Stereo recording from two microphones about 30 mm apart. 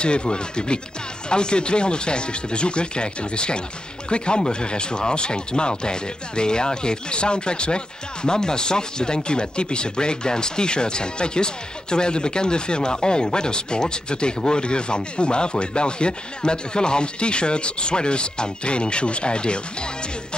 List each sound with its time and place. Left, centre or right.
0.0 s speech: left